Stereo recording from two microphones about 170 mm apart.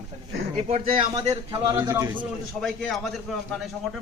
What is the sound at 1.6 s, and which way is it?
Speech, 20° right (ahead or behind).